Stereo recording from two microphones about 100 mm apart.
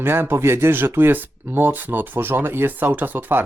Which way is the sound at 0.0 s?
20° right (ahead or behind).